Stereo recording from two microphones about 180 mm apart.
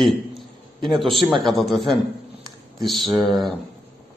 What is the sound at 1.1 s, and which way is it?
Speech, 25° right (ahead or behind).